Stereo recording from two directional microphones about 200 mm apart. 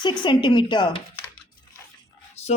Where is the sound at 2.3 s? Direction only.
30° left (ahead or behind).